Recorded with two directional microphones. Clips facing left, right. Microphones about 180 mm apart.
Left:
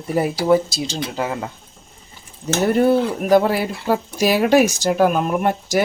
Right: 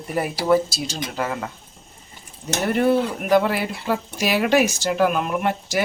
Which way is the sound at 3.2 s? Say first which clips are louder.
Left 4 dB; 35° left (ahead or behind).